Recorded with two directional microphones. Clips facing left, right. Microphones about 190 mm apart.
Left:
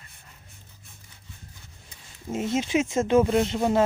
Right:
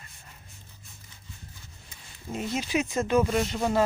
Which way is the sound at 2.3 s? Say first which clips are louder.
Left 4 dB; 25° left (ahead or behind).